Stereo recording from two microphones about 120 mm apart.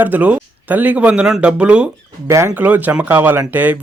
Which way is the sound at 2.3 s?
25° right (ahead or behind).